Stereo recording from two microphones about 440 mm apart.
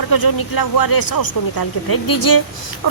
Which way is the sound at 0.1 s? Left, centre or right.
Left.